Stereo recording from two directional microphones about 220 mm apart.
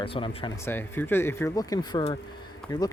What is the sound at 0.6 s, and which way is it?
Speech, 10° left (ahead or behind).